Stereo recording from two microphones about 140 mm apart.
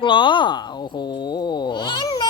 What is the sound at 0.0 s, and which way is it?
Cat, 35° left (ahead or behind).